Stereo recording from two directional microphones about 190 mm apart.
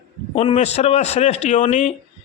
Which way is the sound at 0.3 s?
35° left (ahead or behind).